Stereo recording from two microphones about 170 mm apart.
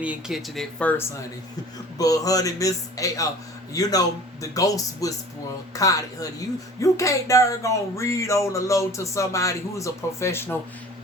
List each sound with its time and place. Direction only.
0.0 s speech: 5° right (ahead or behind)
2.0 s a man's voice: 20° left (ahead or behind)